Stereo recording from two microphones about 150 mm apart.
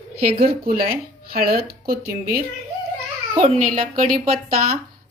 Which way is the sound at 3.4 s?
45° right (ahead or behind).